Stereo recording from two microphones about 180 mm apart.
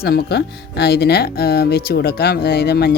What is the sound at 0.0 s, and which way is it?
Speech, 60° left (ahead or behind).